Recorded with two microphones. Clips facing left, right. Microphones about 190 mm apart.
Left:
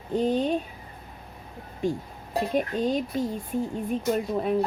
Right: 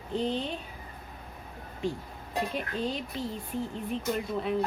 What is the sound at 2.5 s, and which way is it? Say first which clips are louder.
Speech: left 7 dB; 45° left (ahead or behind).